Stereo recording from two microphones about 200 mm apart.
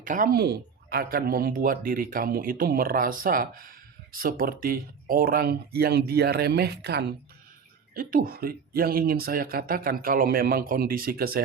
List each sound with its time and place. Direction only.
0.0 s speech: 40° right (ahead or behind)